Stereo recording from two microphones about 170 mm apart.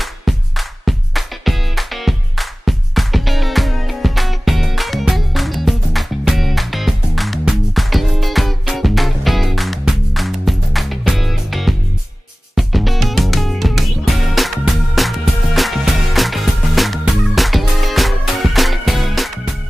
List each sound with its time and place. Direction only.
0.0 s music: centre (ahead or behind)